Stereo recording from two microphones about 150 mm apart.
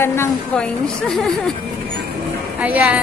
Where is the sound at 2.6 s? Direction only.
10° right (ahead or behind).